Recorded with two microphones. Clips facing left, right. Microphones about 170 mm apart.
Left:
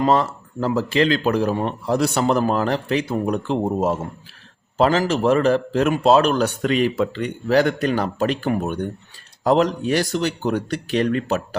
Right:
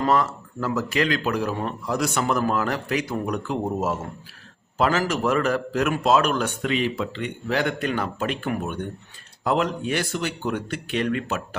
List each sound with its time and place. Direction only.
0.0 s a man's voice: 25° left (ahead or behind)